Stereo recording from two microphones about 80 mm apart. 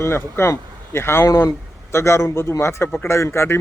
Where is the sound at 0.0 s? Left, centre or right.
Left.